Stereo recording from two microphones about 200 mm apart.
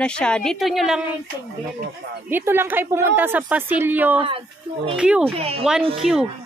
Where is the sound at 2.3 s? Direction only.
10° right (ahead or behind).